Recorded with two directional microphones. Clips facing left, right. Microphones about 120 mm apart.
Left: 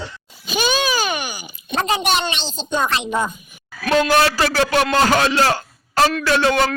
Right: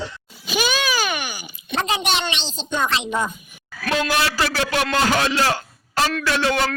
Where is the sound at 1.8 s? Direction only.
45° left (ahead or behind).